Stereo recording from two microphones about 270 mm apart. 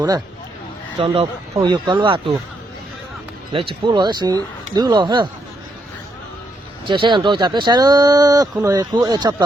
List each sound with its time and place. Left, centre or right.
0.9 s speech: centre
3.5 s speech: centre
6.8 s speech: centre